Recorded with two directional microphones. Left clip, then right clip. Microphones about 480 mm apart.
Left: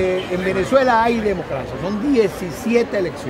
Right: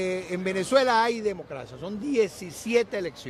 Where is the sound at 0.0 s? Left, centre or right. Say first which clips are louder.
Left 9 dB; right.